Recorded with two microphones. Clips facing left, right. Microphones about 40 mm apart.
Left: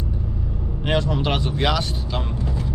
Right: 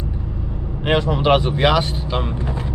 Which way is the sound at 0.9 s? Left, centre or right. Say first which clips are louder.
Right 6 dB; right.